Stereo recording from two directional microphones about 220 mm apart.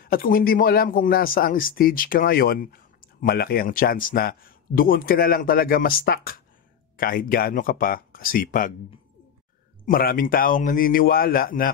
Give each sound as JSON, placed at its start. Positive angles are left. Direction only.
{"t": 0.0, "sound": "speech", "side_deg": 40}
{"t": 9.8, "sound": "speech", "side_deg": 40}